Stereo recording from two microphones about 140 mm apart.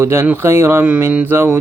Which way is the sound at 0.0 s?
15° right (ahead or behind).